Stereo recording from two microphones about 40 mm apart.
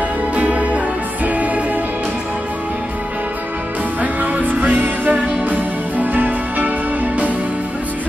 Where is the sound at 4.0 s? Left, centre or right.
Right.